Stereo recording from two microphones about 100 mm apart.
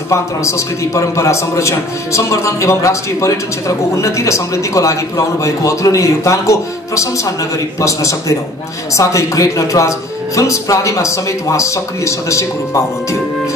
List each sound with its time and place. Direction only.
0.1 s a man's voice: 30° left (ahead or behind)